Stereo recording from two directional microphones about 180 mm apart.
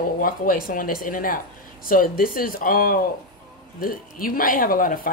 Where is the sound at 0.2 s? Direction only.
50° left (ahead or behind).